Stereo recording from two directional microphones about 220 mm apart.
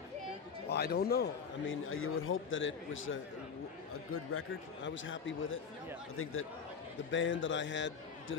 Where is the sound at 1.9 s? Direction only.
65° left (ahead or behind).